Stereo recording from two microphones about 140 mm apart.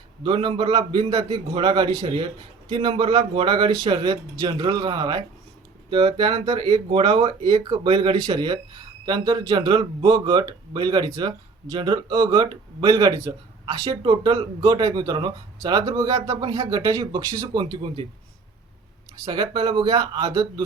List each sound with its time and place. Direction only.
0.3 s speech: 35° right (ahead or behind)
19.2 s speech: 30° right (ahead or behind)